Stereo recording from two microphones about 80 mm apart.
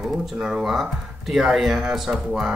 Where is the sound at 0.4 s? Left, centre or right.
Centre.